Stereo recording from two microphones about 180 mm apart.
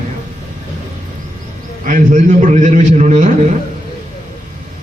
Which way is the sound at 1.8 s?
50° right (ahead or behind).